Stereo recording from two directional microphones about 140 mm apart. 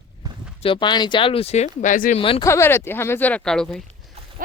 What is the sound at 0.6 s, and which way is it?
Speech, 35° left (ahead or behind).